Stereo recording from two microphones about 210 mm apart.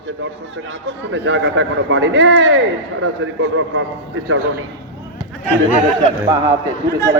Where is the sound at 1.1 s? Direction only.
60° right (ahead or behind).